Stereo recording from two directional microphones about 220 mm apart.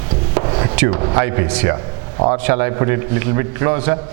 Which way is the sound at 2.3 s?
10° right (ahead or behind).